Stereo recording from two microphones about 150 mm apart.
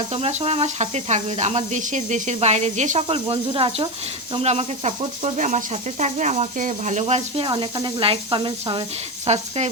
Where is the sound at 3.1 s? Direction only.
40° right (ahead or behind).